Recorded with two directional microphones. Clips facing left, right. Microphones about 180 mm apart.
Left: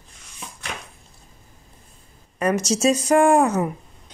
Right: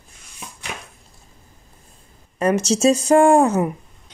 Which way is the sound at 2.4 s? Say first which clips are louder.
Right 3 dB; 30° right (ahead or behind).